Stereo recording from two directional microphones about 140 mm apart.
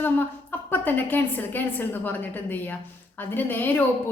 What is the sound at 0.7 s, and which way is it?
A woman's voice, 15° left (ahead or behind).